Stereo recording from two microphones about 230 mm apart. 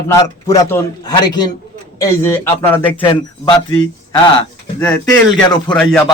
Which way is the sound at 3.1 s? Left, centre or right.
Left.